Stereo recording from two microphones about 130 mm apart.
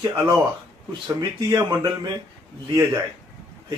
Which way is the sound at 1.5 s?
30° right (ahead or behind).